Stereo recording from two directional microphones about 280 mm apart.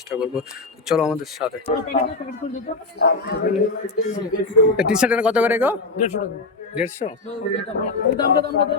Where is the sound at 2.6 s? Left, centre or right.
Left.